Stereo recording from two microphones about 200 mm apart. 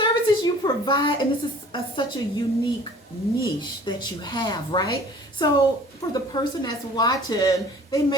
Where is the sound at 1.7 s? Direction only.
25° left (ahead or behind).